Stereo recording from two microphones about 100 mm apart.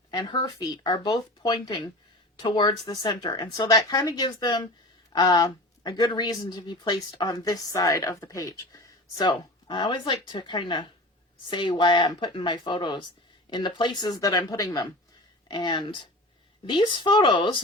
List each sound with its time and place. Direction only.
0.1 s speech: 40° left (ahead or behind)
2.9 s speech: 40° left (ahead or behind)
9.6 s speech: 50° left (ahead or behind)
15.4 s speech: 50° left (ahead or behind)